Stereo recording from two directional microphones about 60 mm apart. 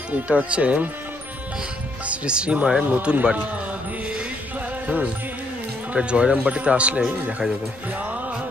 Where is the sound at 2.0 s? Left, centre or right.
Centre.